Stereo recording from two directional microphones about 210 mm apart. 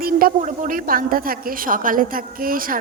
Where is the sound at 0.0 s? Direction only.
45° right (ahead or behind).